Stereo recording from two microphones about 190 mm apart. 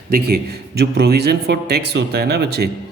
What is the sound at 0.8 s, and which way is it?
Speech, 60° right (ahead or behind).